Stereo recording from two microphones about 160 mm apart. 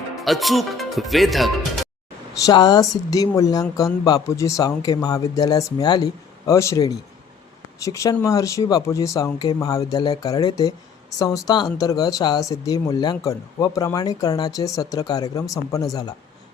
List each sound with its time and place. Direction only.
0.3 s speech: centre (ahead or behind)
2.5 s speech: 25° left (ahead or behind)